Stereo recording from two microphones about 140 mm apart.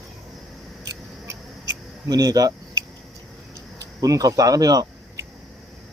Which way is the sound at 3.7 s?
25° right (ahead or behind).